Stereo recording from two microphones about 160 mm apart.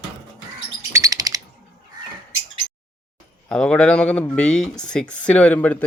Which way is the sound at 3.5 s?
5° left (ahead or behind).